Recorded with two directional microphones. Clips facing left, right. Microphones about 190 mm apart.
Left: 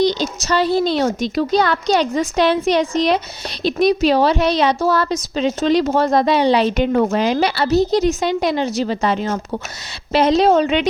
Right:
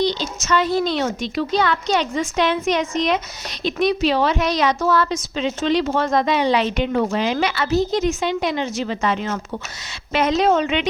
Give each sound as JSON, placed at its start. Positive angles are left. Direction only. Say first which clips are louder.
{"t": 0.0, "sound": "a woman's voice", "louder": "left 4 dB", "side_deg": 45}